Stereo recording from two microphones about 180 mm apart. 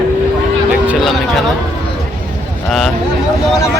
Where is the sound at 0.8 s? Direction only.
5° right (ahead or behind).